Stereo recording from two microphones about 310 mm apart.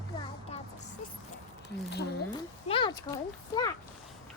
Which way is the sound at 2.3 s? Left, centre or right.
Centre.